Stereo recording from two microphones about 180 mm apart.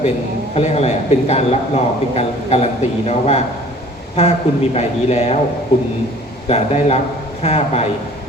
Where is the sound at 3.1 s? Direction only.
35° left (ahead or behind).